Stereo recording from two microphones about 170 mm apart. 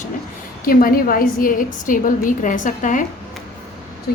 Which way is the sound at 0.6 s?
60° left (ahead or behind).